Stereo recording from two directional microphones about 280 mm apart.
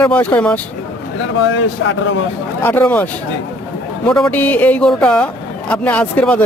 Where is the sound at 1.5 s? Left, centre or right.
Left.